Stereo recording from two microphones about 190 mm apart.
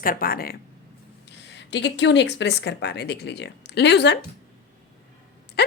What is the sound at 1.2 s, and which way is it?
Speech, 65° left (ahead or behind).